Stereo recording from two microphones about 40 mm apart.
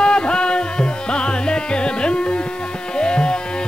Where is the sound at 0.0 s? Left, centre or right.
Left.